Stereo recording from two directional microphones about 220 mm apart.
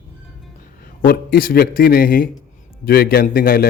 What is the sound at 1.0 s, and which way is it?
A man's voice, 40° left (ahead or behind).